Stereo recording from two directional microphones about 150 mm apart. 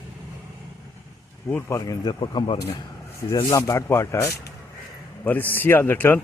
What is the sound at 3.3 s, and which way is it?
Speech, 20° left (ahead or behind).